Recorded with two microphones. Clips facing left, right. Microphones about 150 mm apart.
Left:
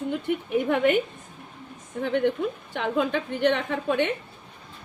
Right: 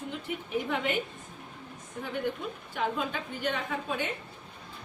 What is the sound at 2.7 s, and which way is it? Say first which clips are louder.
A woman's voice: left 5 dB; 65° left (ahead or behind).